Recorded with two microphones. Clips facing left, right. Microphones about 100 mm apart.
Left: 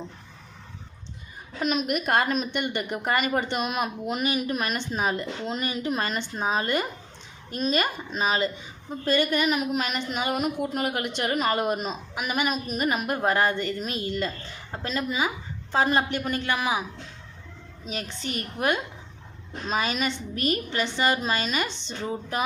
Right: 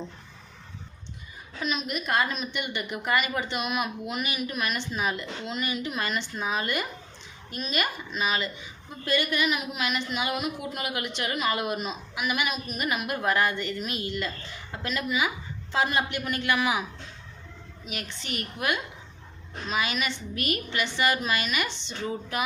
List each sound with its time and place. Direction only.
1.5 s a woman's voice: 50° left (ahead or behind); by 16.8 s 30° left (ahead or behind)
17.8 s a woman's voice: 35° left (ahead or behind)